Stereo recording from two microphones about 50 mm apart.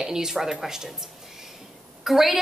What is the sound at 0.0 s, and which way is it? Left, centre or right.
Speech, centre.